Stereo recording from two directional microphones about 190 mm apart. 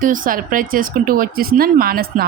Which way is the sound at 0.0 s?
50° right (ahead or behind).